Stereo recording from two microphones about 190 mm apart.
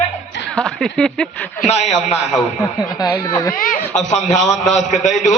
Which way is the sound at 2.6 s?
20° left (ahead or behind).